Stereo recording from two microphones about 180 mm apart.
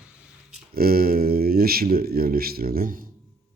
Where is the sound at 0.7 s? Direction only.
55° right (ahead or behind).